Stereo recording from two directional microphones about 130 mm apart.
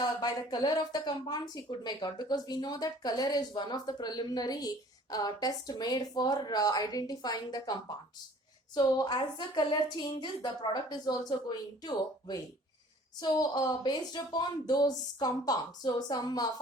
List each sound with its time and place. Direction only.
0.0 s speech: 30° left (ahead or behind)